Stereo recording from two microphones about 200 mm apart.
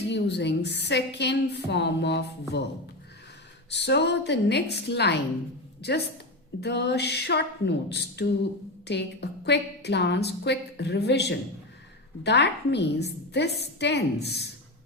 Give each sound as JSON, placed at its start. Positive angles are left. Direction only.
{"t": 0.1, "sound": "a woman's voice", "side_deg": 60}
{"t": 3.7, "sound": "a woman's voice", "side_deg": 60}
{"t": 6.6, "sound": "a woman's voice", "side_deg": 60}